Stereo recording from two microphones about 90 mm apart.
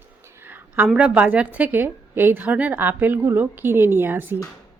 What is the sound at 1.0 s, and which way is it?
Speech, 15° right (ahead or behind).